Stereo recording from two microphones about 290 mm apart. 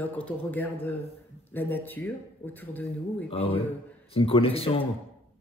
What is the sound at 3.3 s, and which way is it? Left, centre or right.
Speech, centre.